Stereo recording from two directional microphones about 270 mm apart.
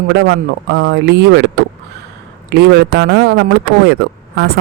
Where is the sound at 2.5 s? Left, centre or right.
Right.